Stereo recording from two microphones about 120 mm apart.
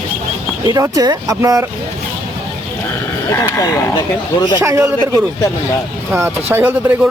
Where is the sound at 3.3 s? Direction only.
25° left (ahead or behind).